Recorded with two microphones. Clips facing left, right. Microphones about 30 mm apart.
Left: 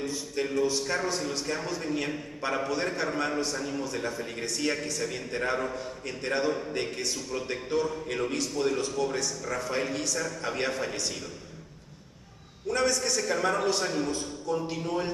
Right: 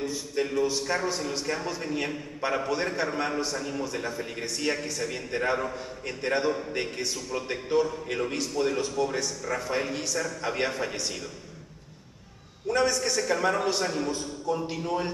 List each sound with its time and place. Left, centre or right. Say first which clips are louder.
0.0 s speech: right 2 dB; centre
12.6 s speech: right 2 dB; centre